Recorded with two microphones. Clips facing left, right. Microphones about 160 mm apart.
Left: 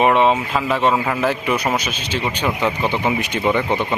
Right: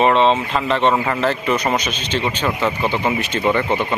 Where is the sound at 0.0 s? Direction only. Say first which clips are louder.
Even; 10° left (ahead or behind).